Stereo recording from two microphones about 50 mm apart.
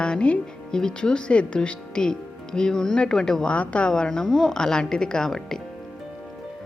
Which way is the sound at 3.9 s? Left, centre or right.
Centre.